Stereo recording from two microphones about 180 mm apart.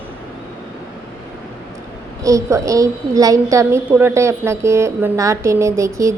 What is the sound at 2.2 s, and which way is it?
A woman's voice, 20° right (ahead or behind).